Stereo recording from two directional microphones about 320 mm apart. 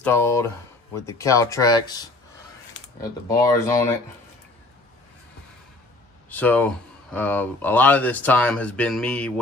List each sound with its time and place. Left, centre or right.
0.0 s speech: centre
6.2 s speech: centre